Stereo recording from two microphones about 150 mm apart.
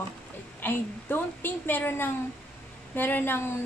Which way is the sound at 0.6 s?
15° left (ahead or behind).